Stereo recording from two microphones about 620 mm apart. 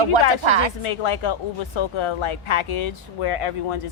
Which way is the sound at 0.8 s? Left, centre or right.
Left.